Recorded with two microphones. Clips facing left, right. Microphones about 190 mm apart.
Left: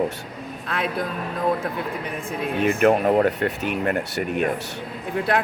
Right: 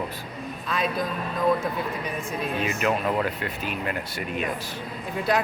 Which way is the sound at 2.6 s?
55° left (ahead or behind).